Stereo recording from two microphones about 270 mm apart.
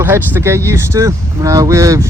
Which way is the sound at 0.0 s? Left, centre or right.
Centre.